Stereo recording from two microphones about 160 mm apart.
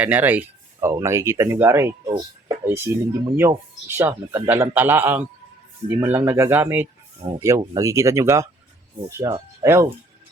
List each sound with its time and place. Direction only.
0.0 s a man's voice: 10° right (ahead or behind)
7.2 s speech: 25° right (ahead or behind)